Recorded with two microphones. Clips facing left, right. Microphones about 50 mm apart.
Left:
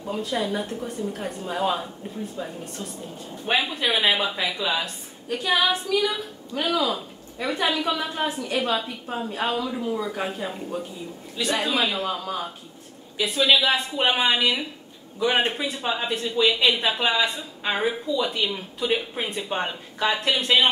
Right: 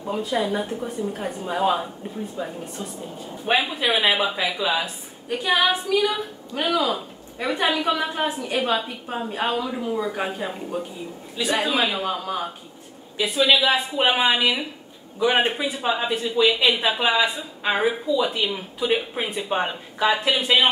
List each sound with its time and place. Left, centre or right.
0.2 s a woman's voice: centre
13.2 s a woman's voice: centre